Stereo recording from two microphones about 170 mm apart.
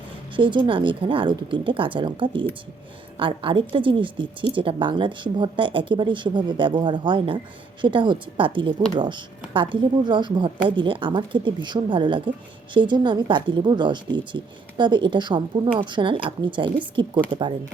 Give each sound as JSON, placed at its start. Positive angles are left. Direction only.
{"t": 0.3, "sound": "speech", "side_deg": -30}